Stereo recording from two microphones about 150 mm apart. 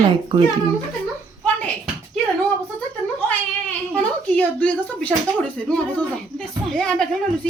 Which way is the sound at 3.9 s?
10° left (ahead or behind).